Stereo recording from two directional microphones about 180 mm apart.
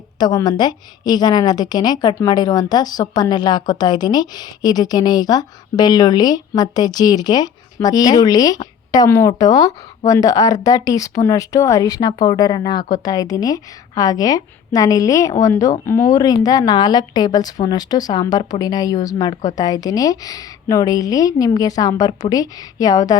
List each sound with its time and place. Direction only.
0.2 s a woman's voice: 20° left (ahead or behind)